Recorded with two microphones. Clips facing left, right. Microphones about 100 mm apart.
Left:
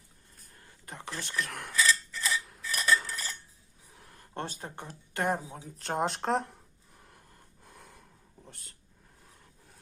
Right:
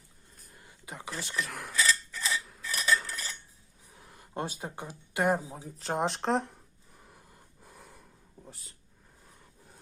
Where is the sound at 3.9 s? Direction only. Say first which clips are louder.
Right 2 dB; 5° right (ahead or behind).